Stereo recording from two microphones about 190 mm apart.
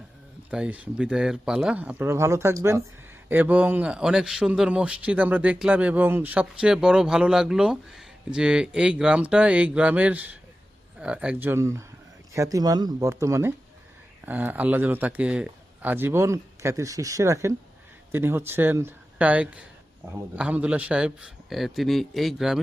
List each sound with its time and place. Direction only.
0.5 s a man's voice: 5° right (ahead or behind)